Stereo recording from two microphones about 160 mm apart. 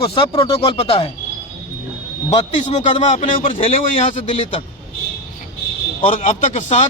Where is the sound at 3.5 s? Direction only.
50° left (ahead or behind).